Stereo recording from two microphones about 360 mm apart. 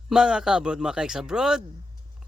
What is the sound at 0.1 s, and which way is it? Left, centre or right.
Speech, centre.